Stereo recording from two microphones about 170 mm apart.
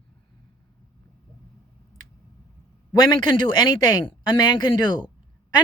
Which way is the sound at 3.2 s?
25° left (ahead or behind).